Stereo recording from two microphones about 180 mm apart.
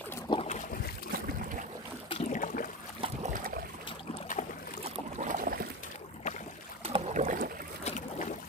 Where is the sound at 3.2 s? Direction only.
50° right (ahead or behind).